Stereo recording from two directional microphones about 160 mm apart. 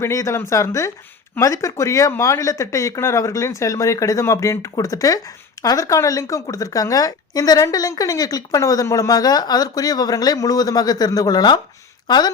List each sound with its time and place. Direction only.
0.0 s speech: 20° left (ahead or behind)